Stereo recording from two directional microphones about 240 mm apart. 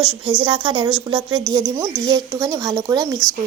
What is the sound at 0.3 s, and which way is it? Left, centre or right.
Speech, centre.